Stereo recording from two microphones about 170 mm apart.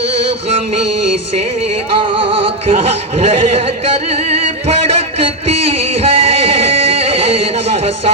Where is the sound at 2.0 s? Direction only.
30° right (ahead or behind).